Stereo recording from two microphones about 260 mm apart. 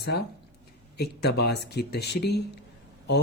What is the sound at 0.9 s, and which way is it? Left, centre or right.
Speech, left.